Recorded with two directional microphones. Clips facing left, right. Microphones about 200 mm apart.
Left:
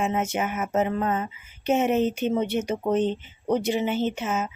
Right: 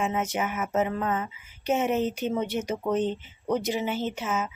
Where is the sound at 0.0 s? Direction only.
25° left (ahead or behind).